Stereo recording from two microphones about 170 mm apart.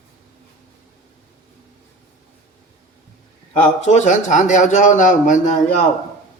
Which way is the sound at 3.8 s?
45° left (ahead or behind).